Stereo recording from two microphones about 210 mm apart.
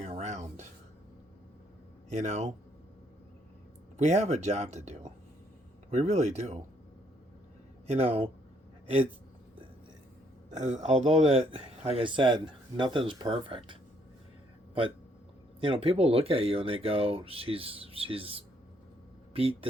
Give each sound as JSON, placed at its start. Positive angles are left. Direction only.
{"t": 0.0, "sound": "music", "side_deg": -30}
{"t": 2.0, "sound": "speech", "side_deg": -35}
{"t": 3.9, "sound": "speech", "side_deg": -35}
{"t": 7.9, "sound": "speech", "side_deg": -30}
{"t": 10.5, "sound": "speech", "side_deg": -35}
{"t": 15.6, "sound": "speech", "side_deg": -25}